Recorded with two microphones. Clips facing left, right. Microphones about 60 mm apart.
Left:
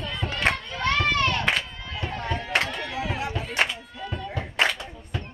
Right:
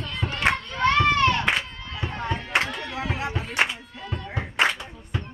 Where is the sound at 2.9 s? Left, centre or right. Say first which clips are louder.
Right 1 dB; right.